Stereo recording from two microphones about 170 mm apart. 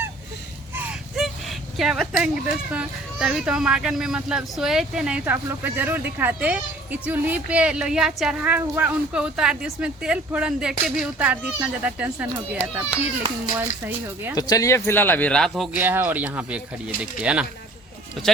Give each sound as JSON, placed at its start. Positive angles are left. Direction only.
{"t": 0.8, "sound": "a sound", "side_deg": 0}
{"t": 2.7, "sound": "speech", "side_deg": -5}
{"t": 13.2, "sound": "a child's voice", "side_deg": -20}
{"t": 14.3, "sound": "speech", "side_deg": 20}
{"t": 15.8, "sound": "speech", "side_deg": -10}